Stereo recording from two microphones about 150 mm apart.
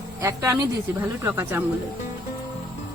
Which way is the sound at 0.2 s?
20° right (ahead or behind).